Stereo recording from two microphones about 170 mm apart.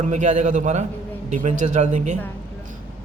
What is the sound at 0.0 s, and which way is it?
A man's voice, 45° right (ahead or behind).